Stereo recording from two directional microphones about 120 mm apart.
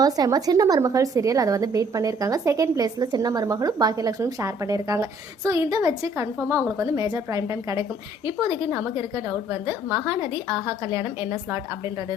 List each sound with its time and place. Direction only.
0.0 s a woman's voice: 30° right (ahead or behind)